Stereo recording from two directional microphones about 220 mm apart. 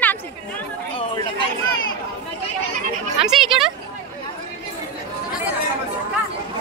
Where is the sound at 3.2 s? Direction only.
Centre (ahead or behind).